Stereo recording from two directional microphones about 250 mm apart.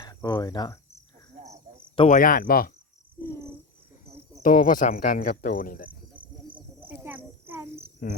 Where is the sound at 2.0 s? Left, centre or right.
Left.